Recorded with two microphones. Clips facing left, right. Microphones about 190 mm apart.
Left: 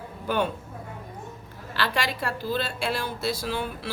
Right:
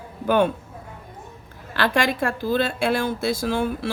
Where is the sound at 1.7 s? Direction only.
50° right (ahead or behind).